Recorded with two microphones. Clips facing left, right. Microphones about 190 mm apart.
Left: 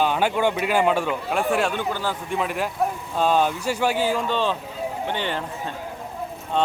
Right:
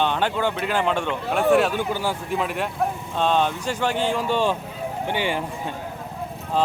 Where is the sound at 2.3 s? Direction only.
Centre (ahead or behind).